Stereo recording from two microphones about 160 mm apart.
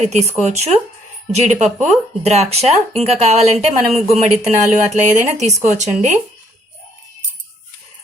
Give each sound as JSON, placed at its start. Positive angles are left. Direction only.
{"t": 0.0, "sound": "speech", "side_deg": -45}